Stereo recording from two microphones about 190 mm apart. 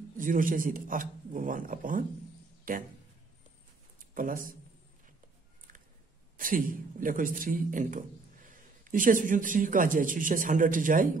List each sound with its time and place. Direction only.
0.2 s a man's voice: 45° right (ahead or behind)
4.1 s a man's voice: 45° right (ahead or behind)
6.3 s a man's voice: 45° right (ahead or behind)